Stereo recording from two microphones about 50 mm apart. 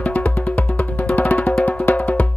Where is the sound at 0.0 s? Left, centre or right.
Left.